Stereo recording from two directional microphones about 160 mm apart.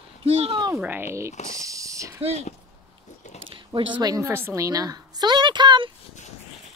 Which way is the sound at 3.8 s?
25° right (ahead or behind).